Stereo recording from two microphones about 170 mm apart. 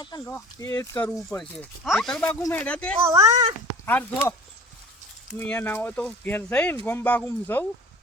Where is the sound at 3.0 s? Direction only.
15° right (ahead or behind).